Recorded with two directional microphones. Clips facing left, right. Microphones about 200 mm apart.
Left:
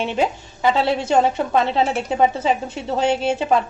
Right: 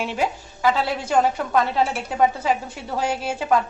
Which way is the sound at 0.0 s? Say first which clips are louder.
Left 3 dB; 25° left (ahead or behind).